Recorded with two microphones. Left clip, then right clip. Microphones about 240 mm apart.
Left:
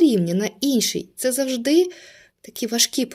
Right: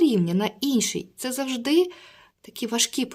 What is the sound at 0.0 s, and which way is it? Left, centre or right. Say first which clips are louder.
A woman's voice: left 3 dB; centre.